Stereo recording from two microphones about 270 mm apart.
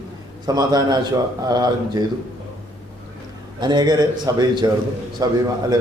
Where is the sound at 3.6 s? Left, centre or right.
Centre.